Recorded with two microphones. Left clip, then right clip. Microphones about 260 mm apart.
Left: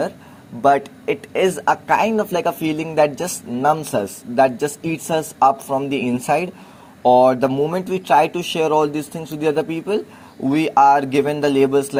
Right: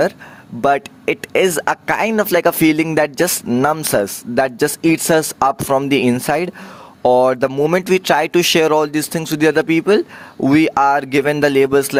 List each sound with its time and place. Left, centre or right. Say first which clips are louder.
0.6 s speech: even; right